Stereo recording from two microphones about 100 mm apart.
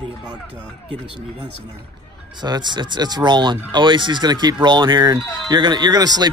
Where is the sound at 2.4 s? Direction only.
45° right (ahead or behind).